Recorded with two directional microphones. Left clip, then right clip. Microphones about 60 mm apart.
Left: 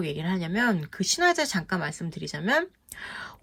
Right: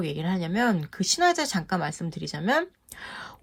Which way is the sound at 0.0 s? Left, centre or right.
Right.